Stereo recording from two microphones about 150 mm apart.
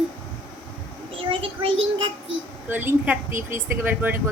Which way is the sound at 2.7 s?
10° right (ahead or behind).